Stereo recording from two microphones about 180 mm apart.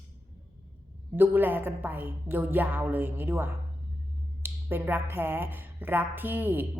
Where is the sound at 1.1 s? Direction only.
10° right (ahead or behind).